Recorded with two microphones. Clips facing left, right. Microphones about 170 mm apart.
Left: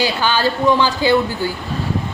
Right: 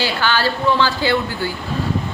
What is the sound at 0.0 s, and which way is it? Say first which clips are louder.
A woman's voice: left 2 dB; 15° left (ahead or behind).